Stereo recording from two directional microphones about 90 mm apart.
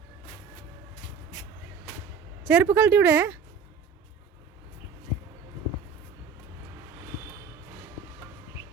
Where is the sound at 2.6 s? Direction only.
25° right (ahead or behind).